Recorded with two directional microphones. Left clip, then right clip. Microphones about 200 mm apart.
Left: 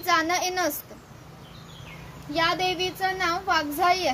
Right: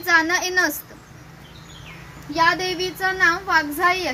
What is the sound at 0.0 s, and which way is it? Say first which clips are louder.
Speech: right 5 dB; 40° left (ahead or behind).